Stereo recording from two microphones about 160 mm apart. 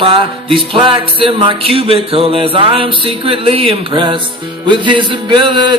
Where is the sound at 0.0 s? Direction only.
35° right (ahead or behind).